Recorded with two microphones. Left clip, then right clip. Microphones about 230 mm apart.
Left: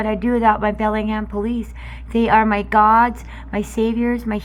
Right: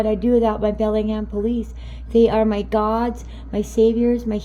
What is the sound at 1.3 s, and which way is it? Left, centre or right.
Speech, left.